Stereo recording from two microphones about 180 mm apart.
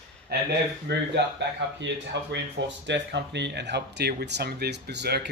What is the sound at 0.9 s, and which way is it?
Speech, 70° right (ahead or behind).